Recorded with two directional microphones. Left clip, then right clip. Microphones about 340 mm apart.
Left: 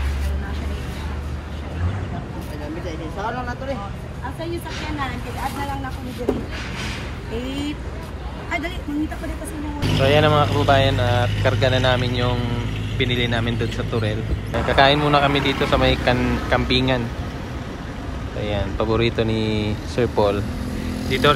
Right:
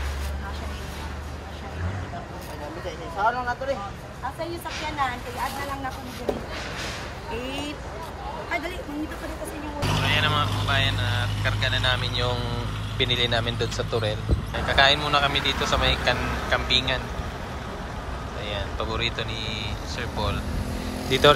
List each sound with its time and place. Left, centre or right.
10.0 s speech: centre
18.4 s speech: centre
21.0 s vehicle: centre